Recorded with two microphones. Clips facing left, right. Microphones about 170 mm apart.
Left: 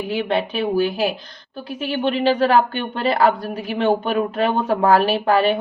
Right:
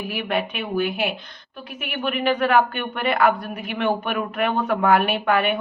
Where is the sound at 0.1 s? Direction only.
25° left (ahead or behind).